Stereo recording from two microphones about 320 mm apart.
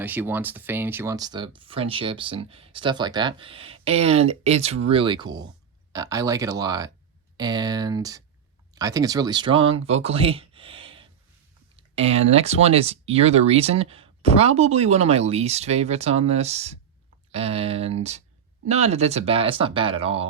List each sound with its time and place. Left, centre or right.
0.0 s speech: centre